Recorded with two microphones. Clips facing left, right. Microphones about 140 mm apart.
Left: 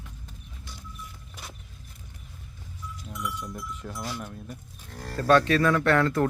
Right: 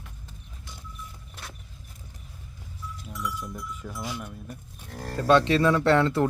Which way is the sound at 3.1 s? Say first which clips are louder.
Right 1 dB; 20° left (ahead or behind).